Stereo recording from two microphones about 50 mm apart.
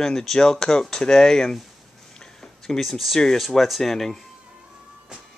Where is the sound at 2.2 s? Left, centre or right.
Centre.